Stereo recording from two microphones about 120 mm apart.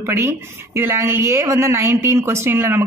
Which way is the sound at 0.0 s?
20° right (ahead or behind).